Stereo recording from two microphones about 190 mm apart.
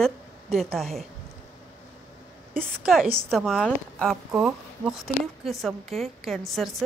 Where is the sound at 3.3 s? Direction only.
5° left (ahead or behind).